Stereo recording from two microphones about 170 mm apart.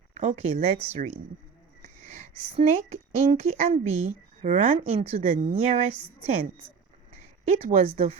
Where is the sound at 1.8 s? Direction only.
40° right (ahead or behind).